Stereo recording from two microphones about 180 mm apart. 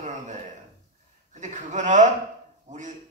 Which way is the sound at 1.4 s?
40° right (ahead or behind).